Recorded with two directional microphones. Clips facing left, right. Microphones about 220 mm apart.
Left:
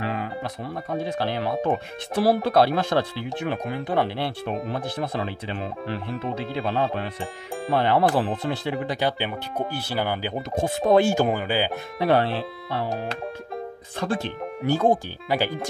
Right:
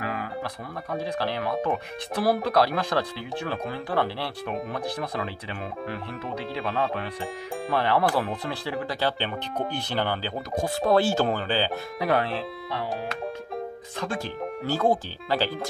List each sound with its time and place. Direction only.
0.0 s music: 25° left (ahead or behind)
0.9 s speech: 25° left (ahead or behind)
7.7 s speech: 25° left (ahead or behind)
12.0 s speech: 30° left (ahead or behind)
13.9 s speech: 25° left (ahead or behind)